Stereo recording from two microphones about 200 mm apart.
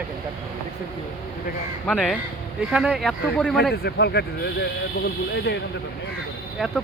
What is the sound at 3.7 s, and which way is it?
Speech, 55° left (ahead or behind).